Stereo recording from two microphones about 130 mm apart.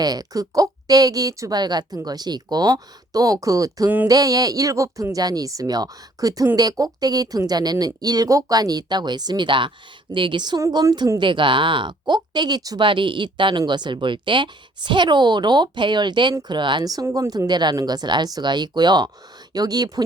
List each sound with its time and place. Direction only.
0.0 s a woman's voice: 30° right (ahead or behind)
3.8 s speech: 15° right (ahead or behind)
4.1 s a woman's voice: 30° right (ahead or behind)